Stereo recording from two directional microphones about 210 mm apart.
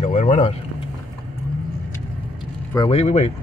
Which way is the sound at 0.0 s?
35° left (ahead or behind).